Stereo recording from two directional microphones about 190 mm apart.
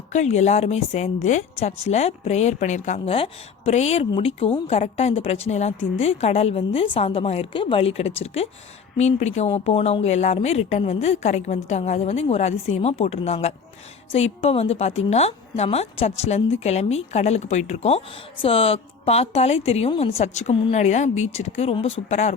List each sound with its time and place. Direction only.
0.1 s speech: 35° left (ahead or behind)